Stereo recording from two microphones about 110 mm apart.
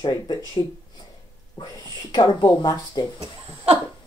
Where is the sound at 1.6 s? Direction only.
50° left (ahead or behind).